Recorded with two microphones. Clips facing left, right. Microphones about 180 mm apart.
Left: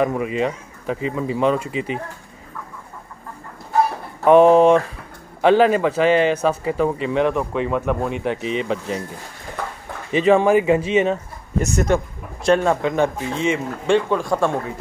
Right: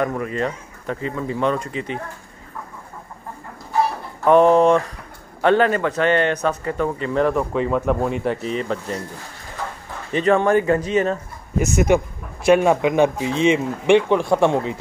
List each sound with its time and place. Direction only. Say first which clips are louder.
0.0 s speech: left 2 dB; 5° left (ahead or behind)
4.3 s speech: left 2 dB; 5° left (ahead or behind)
8.4 s speech: left 1 dB; 90° left
8.6 s speech: left 2 dB; 5° left (ahead or behind)
10.2 s speech: left 2 dB; 5° left (ahead or behind)
11.5 s a man's voice: right 2 dB; 5° right (ahead or behind)